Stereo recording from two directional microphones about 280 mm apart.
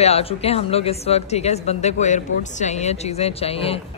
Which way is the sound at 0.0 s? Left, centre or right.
Left.